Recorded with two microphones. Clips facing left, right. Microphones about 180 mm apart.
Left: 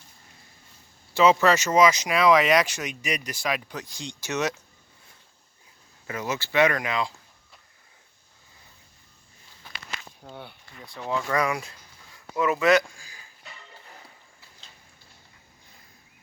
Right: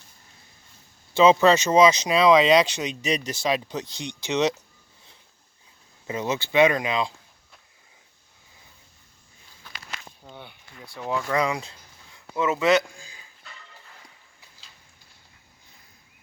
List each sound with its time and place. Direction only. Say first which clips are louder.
1.1 s speech: right 3 dB; 20° right (ahead or behind)
6.1 s speech: right 3 dB; 20° right (ahead or behind)
10.2 s speech: left 2 dB; 5° left (ahead or behind)
11.3 s speech: right 1 dB; 20° right (ahead or behind)